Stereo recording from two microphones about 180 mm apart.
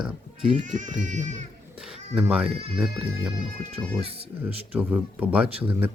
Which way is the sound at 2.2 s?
5° right (ahead or behind).